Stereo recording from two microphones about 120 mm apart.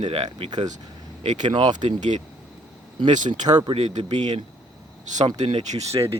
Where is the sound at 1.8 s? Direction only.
80° right.